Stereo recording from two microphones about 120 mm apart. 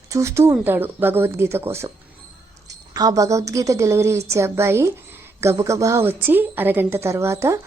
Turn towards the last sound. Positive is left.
turn(degrees=-25)  # may be behind; listen again after turning